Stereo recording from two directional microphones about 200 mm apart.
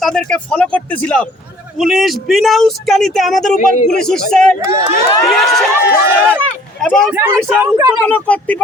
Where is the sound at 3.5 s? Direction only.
40° left (ahead or behind).